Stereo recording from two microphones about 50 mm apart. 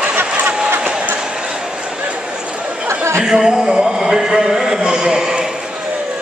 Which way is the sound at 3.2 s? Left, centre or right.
Centre.